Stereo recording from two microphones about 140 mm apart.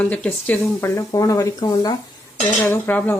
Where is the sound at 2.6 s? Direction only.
15° left (ahead or behind).